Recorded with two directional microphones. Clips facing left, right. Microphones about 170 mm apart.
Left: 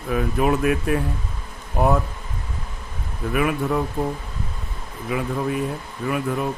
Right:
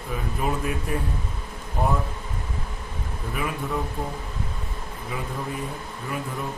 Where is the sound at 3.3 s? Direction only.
70° left (ahead or behind).